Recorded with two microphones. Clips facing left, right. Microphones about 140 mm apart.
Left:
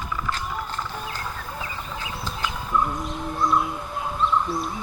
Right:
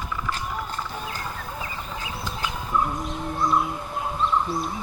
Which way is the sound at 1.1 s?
Centre (ahead or behind).